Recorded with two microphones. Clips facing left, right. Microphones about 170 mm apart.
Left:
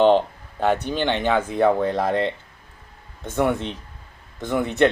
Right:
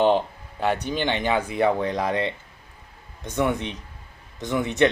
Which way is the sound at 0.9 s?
15° right (ahead or behind).